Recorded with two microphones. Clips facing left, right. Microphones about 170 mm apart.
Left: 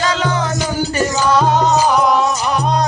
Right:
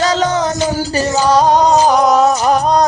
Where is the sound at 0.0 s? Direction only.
35° right (ahead or behind).